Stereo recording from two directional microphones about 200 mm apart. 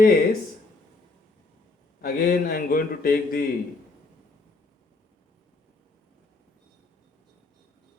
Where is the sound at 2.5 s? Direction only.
45° left (ahead or behind).